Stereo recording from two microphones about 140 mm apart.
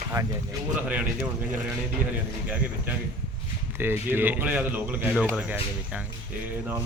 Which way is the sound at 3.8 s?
15° right (ahead or behind).